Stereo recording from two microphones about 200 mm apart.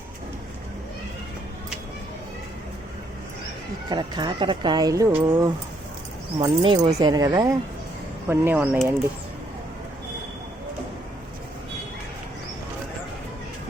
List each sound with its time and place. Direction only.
3.8 s speech: 20° right (ahead or behind)